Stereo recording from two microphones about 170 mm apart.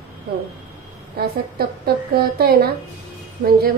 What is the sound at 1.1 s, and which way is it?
A woman's voice, 65° right (ahead or behind).